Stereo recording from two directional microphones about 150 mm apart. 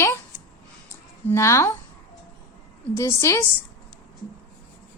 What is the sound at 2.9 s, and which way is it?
Speech, 15° left (ahead or behind).